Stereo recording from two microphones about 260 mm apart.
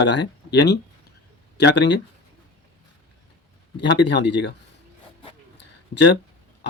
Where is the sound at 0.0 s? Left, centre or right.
Left.